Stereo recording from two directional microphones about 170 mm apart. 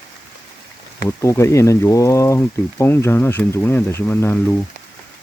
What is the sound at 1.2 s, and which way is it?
Speech, 15° left (ahead or behind).